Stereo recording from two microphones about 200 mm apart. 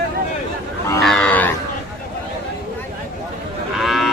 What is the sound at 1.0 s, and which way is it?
Cattle, 5° left (ahead or behind).